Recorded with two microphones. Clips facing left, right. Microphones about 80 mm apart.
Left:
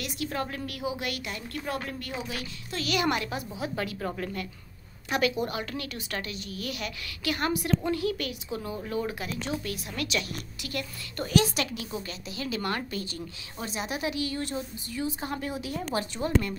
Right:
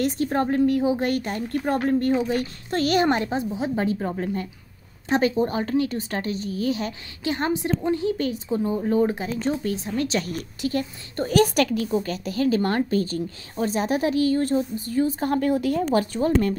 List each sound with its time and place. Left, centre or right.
0.0 s speech: right